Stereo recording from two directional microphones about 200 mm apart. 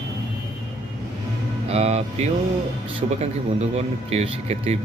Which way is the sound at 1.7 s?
30° right (ahead or behind).